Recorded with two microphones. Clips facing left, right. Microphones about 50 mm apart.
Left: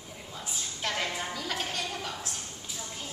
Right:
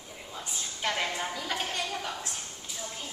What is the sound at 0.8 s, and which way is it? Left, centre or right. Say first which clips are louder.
A woman's voice: right 2 dB; centre.